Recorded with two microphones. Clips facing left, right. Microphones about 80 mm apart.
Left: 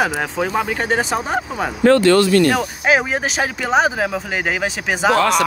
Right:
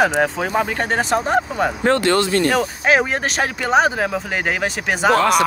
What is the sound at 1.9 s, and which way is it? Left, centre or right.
Speech, right.